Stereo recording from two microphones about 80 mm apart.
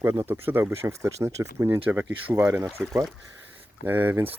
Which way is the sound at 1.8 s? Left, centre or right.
Right.